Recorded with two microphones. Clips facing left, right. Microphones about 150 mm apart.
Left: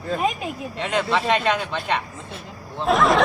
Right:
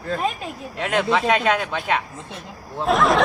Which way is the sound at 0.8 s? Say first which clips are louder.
Right 2 dB; 5° right (ahead or behind).